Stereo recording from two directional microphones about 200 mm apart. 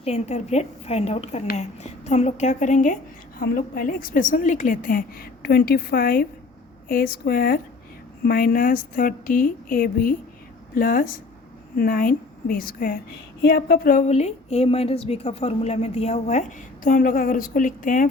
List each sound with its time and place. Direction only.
0.0 s a woman's voice: 35° left (ahead or behind)